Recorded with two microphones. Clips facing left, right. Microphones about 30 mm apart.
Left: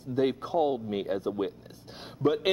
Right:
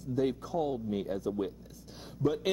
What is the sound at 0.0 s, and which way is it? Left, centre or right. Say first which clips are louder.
Speech: left 4 dB; left.